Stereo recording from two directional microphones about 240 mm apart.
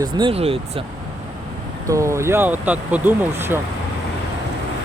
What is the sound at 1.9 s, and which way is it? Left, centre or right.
Speech, centre.